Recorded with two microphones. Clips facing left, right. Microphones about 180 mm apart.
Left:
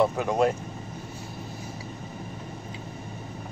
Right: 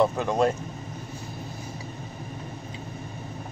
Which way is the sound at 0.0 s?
10° left (ahead or behind).